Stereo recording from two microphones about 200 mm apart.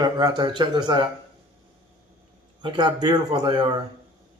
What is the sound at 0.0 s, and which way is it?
Speech, 20° right (ahead or behind).